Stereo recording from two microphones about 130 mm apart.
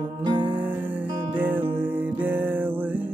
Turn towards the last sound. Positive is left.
turn(degrees=-15)  # may be behind; listen again after turning